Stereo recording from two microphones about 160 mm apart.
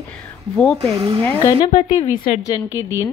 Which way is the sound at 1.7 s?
45° left (ahead or behind).